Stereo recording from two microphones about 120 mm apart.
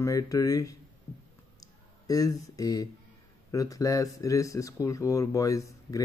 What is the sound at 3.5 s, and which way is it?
Speech, 30° left (ahead or behind).